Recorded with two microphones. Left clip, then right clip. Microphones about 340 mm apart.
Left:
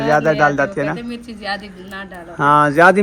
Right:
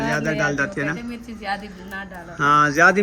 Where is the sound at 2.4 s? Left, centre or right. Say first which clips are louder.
Left 4 dB; centre.